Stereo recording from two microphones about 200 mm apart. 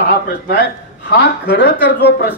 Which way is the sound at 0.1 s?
60° left (ahead or behind).